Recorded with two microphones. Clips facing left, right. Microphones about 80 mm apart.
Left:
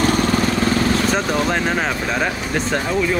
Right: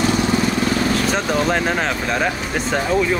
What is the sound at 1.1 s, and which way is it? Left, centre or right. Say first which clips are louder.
Speech: even; centre.